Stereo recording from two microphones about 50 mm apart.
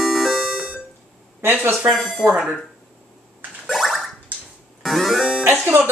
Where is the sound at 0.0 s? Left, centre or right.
Centre.